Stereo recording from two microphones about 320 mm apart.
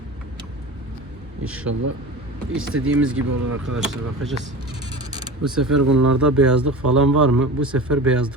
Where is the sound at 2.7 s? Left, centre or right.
Right.